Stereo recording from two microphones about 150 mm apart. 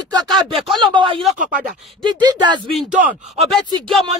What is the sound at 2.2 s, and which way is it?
Speech, 30° right (ahead or behind).